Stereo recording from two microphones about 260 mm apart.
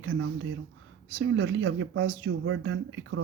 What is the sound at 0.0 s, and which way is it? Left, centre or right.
Speech, right.